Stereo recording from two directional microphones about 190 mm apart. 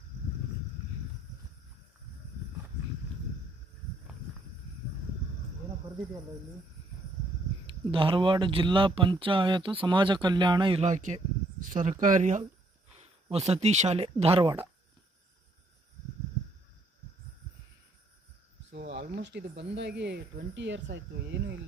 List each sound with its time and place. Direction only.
7.9 s speech: 25° right (ahead or behind)
18.7 s a sound: 65° right (ahead or behind)
19.7 s speech: 65° right (ahead or behind)